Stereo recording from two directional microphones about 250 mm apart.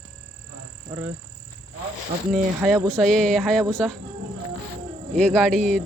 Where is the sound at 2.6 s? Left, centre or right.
Centre.